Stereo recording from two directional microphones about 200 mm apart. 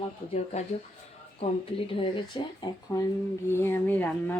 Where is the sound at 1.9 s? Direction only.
25° left (ahead or behind).